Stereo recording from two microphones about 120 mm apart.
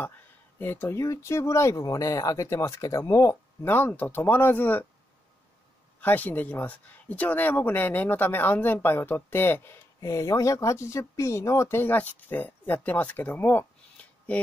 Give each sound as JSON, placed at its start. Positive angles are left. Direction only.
{"t": 0.6, "sound": "speech", "side_deg": 20}
{"t": 5.9, "sound": "speech", "side_deg": 15}